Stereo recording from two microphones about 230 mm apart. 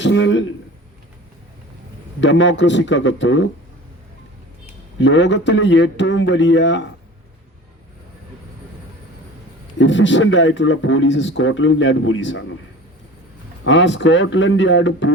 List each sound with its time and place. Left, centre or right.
0.0 s a man's voice: left
2.2 s a man's voice: left
4.9 s a man's voice: left
9.7 s a man's voice: left
13.7 s a man's voice: left